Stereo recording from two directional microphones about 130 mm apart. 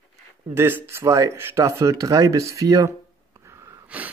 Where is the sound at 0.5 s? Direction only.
20° right (ahead or behind).